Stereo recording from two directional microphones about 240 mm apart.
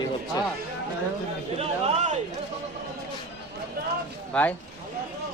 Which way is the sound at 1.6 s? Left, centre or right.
Right.